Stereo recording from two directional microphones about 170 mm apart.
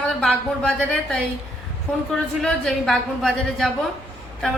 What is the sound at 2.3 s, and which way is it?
Speech, 5° left (ahead or behind).